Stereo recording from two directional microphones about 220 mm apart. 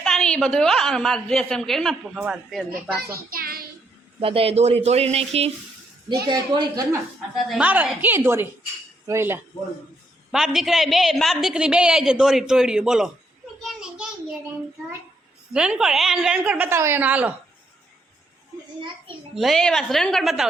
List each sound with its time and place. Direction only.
0.0 s a woman's voice: 5° left (ahead or behind)
3.0 s child singing: 45° right (ahead or behind)
4.2 s speech: 25° right (ahead or behind)
6.2 s a woman's voice: 15° right (ahead or behind)
7.3 s a woman's voice: centre (ahead or behind)
13.6 s child singing: centre (ahead or behind)
15.5 s a woman's voice: 5° right (ahead or behind)
19.3 s a woman's voice: centre (ahead or behind)